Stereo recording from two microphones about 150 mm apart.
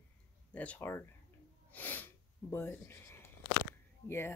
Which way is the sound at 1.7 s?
10° left (ahead or behind).